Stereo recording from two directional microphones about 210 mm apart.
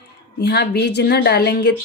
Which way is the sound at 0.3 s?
50° left (ahead or behind).